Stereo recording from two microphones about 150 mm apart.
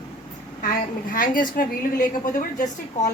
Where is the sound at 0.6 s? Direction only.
65° left (ahead or behind).